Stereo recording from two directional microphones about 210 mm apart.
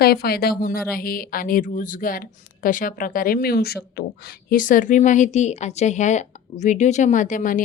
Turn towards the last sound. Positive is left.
turn(degrees=40)  # may be behind; listen again after turning